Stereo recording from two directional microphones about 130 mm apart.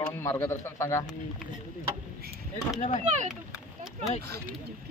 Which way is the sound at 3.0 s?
65° right (ahead or behind).